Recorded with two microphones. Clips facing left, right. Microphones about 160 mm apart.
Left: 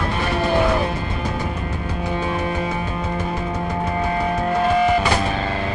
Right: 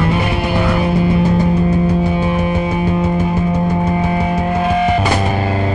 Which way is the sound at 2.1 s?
10° right (ahead or behind).